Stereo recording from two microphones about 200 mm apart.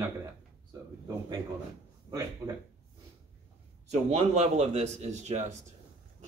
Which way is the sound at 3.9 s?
35° right (ahead or behind).